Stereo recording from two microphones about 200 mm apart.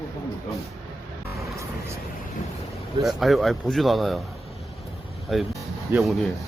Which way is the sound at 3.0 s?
Centre (ahead or behind).